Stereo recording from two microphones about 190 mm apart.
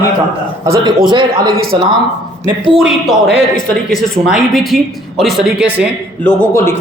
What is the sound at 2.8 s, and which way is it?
Speech, centre (ahead or behind).